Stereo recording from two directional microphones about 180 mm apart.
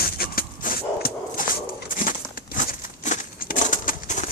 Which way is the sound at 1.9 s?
50° left (ahead or behind).